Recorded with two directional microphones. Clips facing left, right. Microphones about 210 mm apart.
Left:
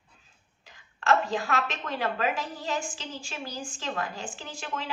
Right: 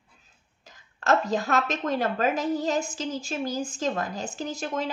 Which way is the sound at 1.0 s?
40° right (ahead or behind).